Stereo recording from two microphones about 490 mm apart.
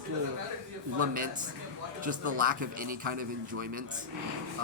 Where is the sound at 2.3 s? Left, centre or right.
Centre.